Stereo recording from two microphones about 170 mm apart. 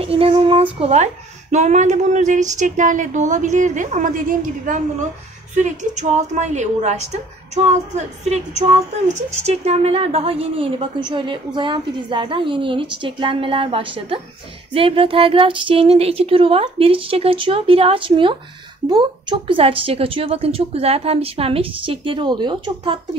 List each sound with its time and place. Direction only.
0.0 s a woman's voice: 35° right (ahead or behind)